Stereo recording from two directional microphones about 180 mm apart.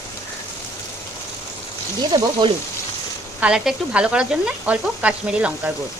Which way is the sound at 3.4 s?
5° right (ahead or behind).